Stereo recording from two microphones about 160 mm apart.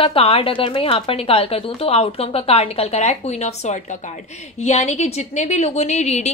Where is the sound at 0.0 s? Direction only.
35° left (ahead or behind).